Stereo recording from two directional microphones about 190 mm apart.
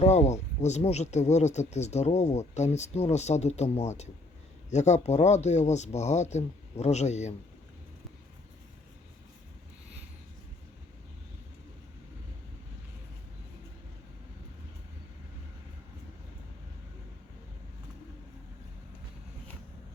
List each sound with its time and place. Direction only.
0.0 s speech: 35° left (ahead or behind)